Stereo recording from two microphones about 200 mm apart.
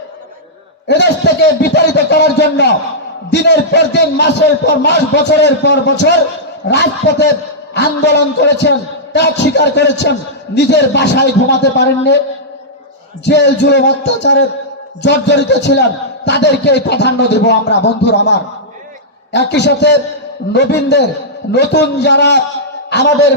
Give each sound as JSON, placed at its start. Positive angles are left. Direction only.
{"t": 0.9, "sound": "a man's voice", "side_deg": 60}
{"t": 13.2, "sound": "a man's voice", "side_deg": 60}